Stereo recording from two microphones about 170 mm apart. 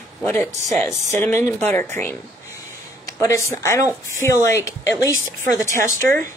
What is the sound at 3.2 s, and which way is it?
Speech, 15° left (ahead or behind).